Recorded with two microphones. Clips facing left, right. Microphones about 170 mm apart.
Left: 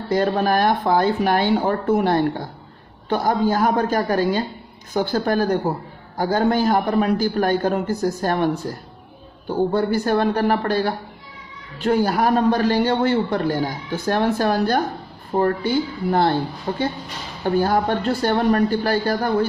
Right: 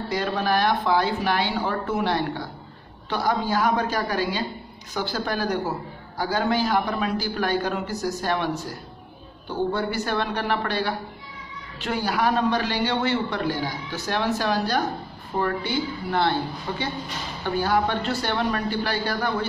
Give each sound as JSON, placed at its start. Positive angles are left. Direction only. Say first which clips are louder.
{"t": 0.1, "sound": "a man's voice", "louder": "left 6 dB", "side_deg": 50}